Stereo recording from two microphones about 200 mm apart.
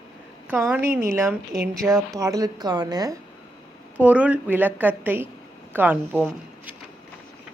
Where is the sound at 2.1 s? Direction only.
15° right (ahead or behind).